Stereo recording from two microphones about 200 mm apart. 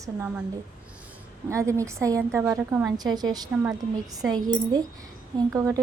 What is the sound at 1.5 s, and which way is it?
A woman's voice, 15° right (ahead or behind).